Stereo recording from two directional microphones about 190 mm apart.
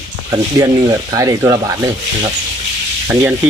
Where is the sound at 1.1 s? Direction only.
20° right (ahead or behind).